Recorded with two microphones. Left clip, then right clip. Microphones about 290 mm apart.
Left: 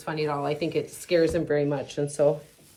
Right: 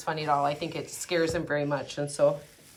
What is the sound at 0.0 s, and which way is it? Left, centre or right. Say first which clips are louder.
Speech: right 2 dB; centre.